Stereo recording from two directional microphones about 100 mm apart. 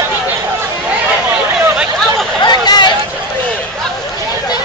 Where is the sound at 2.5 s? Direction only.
45° left (ahead or behind).